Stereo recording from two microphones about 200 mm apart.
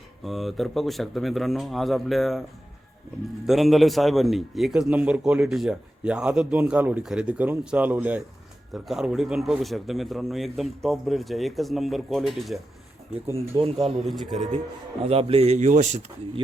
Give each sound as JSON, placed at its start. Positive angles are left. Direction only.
{"t": 0.3, "sound": "a man's voice", "side_deg": 0}
{"t": 3.4, "sound": "a man's voice", "side_deg": 0}
{"t": 13.6, "sound": "speech", "side_deg": -30}
{"t": 14.0, "sound": "a man's voice", "side_deg": 0}
{"t": 15.0, "sound": "speech", "side_deg": -30}